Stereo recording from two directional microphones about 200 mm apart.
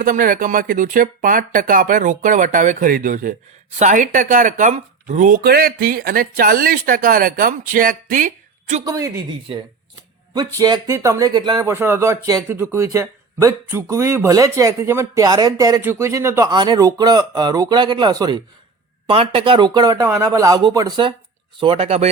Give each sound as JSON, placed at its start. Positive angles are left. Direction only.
{"t": 0.0, "sound": "speech", "side_deg": -45}
{"t": 8.8, "sound": "speech", "side_deg": -20}
{"t": 10.3, "sound": "speech", "side_deg": -20}